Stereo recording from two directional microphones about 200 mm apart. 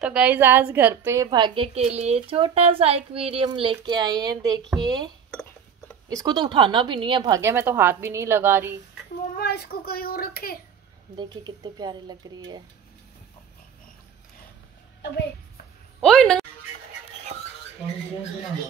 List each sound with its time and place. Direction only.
0.0 s a woman's voice: 5° right (ahead or behind)
6.0 s a woman's voice: 20° right (ahead or behind)
9.4 s speech: 50° left (ahead or behind)
11.1 s a woman's voice: 20° right (ahead or behind)
15.0 s a woman's voice: 60° left (ahead or behind)
16.0 s a woman's voice: 5° left (ahead or behind)